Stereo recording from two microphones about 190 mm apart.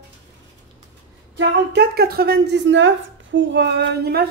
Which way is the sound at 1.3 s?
60° right (ahead or behind).